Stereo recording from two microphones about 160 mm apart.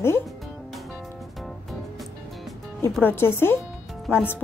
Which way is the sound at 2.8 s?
15° left (ahead or behind).